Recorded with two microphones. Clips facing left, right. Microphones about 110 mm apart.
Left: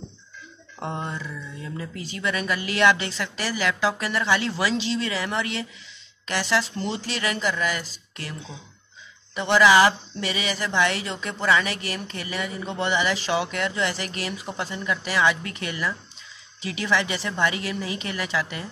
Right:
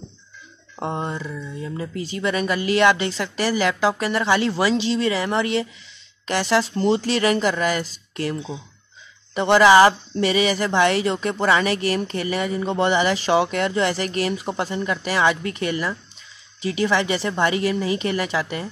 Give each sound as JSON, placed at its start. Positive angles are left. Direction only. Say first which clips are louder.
{"t": 0.7, "sound": "speech", "louder": "right 4 dB", "side_deg": -20}
{"t": 6.9, "sound": "speech", "louder": "right 9 dB", "side_deg": -45}